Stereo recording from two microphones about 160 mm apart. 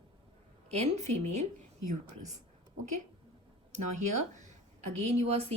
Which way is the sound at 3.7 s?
50° right (ahead or behind).